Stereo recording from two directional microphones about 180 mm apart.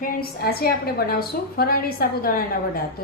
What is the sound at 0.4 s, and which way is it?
A woman's voice, 55° left (ahead or behind).